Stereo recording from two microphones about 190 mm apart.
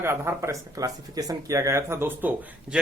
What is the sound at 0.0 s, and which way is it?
Speech, 15° right (ahead or behind).